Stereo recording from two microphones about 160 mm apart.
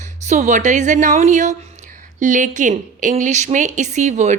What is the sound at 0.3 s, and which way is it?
A woman's voice, 50° right (ahead or behind).